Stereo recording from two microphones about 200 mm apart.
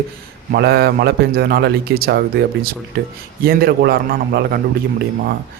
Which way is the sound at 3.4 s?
50° right (ahead or behind).